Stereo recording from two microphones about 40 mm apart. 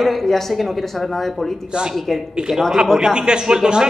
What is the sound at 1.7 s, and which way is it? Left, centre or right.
Speech, centre.